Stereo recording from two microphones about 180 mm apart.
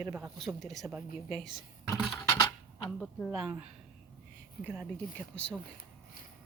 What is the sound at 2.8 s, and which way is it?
Speech, 5° left (ahead or behind).